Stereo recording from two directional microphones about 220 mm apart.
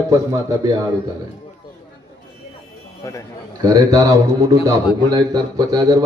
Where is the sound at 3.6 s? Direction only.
15° right (ahead or behind).